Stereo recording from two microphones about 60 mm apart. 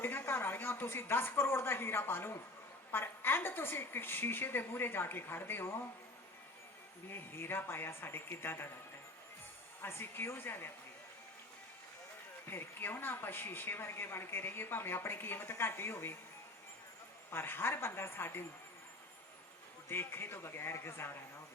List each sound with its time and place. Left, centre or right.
0.0 s speech: left
7.1 s speech: left
9.8 s speech: left
12.5 s speech: left
17.3 s speech: left
19.9 s a man's voice: left